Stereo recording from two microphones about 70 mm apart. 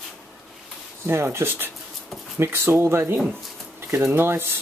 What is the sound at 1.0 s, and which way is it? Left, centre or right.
Speech, right.